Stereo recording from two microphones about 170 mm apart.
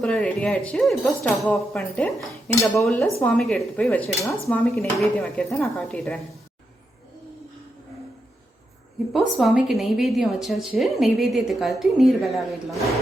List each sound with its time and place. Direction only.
0.0 s a woman's voice: 5° left (ahead or behind)
2.5 s dishes: 20° left (ahead or behind)
3.2 s a woman's voice: 5° left (ahead or behind)
9.1 s a woman's voice: centre (ahead or behind)